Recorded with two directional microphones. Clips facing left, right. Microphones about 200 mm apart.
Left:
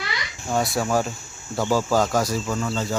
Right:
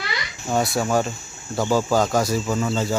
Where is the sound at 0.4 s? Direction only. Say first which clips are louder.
Right 1 dB; centre (ahead or behind).